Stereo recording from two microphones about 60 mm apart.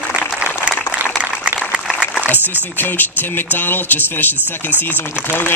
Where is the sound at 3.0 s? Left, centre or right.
Left.